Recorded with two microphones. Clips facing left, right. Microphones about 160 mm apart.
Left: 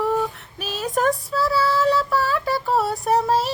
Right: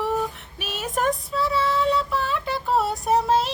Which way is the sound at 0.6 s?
Centre (ahead or behind).